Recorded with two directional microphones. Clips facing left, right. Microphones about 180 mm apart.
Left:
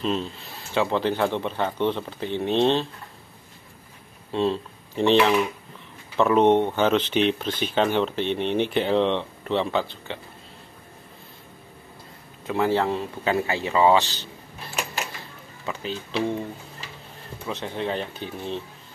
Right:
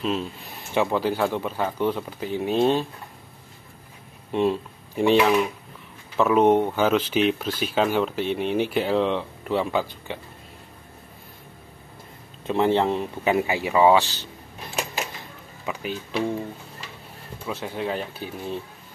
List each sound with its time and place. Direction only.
0.0 s speech: 5° right (ahead or behind)
0.6 s speech: 15° right (ahead or behind)
4.3 s speech: 15° right (ahead or behind)
12.4 s speech: 25° right (ahead or behind)
15.6 s speech: 10° right (ahead or behind)
17.5 s speech: 5° right (ahead or behind)